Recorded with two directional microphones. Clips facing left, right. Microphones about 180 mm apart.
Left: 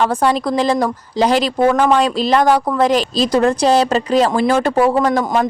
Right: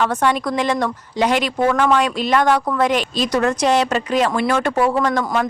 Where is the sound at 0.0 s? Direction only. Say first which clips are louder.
Left 3 dB; 35° left (ahead or behind).